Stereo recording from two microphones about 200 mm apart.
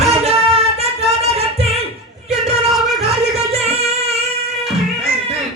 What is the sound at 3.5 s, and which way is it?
Music, 30° right (ahead or behind).